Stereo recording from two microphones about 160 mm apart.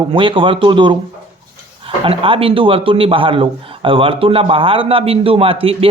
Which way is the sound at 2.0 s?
35° right (ahead or behind).